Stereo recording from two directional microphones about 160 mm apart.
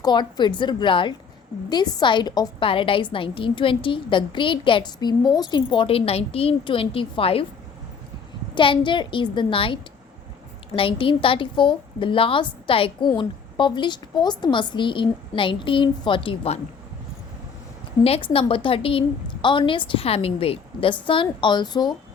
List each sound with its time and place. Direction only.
0.0 s a woman's voice: 25° left (ahead or behind)
8.5 s a woman's voice: 30° left (ahead or behind)
10.8 s a woman's voice: 35° left (ahead or behind)
18.0 s a woman's voice: 35° left (ahead or behind)